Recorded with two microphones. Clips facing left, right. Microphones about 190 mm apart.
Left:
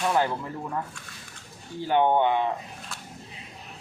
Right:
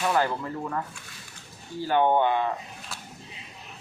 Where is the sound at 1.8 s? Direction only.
20° left (ahead or behind).